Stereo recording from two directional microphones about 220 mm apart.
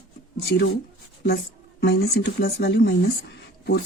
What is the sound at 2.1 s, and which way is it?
Speech, 45° left (ahead or behind).